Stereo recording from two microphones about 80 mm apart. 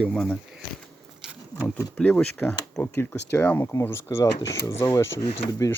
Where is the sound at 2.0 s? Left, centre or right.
Centre.